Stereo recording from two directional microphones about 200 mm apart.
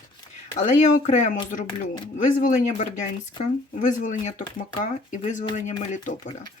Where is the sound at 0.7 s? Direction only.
35° left (ahead or behind).